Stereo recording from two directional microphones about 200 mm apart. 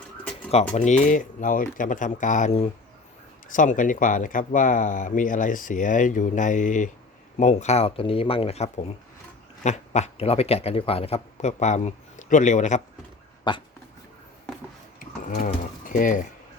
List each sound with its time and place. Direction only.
0.5 s speech: 35° left (ahead or behind)
13.5 s dog: 20° left (ahead or behind)
14.9 s a sound: 35° left (ahead or behind)